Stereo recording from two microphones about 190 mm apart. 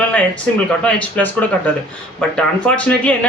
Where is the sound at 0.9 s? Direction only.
5° left (ahead or behind).